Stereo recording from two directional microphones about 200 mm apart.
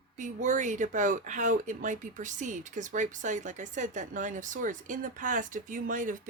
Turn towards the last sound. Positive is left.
turn(degrees=-40)  # may be behind; listen again after turning